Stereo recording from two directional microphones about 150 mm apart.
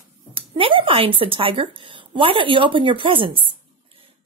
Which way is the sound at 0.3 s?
35° right (ahead or behind).